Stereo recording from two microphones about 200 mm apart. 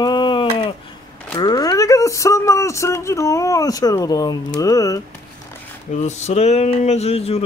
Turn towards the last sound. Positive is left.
turn(degrees=30)  # may be behind; listen again after turning